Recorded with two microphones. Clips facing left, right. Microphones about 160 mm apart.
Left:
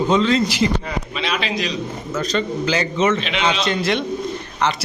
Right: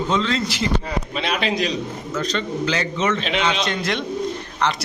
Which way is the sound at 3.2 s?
40° right (ahead or behind).